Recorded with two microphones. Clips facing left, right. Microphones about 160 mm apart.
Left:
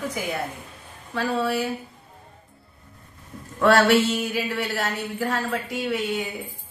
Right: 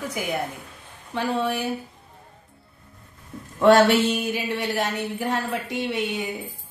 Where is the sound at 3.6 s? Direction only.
20° right (ahead or behind).